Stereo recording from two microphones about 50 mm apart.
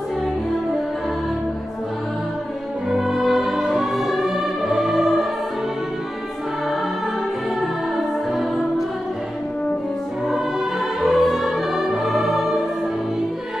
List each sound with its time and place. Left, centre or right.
2.9 s music: centre
11.0 s music: centre